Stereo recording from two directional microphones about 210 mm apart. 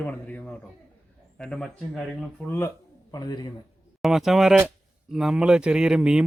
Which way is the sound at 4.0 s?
Centre (ahead or behind).